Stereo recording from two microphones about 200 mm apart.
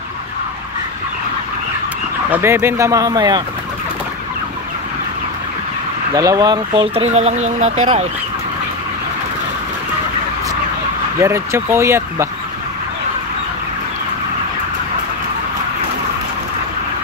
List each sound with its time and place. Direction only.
2.3 s speech: 10° right (ahead or behind)
6.1 s speech: 15° right (ahead or behind); by 8.1 s 35° right (ahead or behind)
11.1 s speech: 15° right (ahead or behind)